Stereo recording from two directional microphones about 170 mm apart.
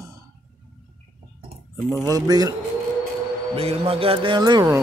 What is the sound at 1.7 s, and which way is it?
Speech, 10° left (ahead or behind).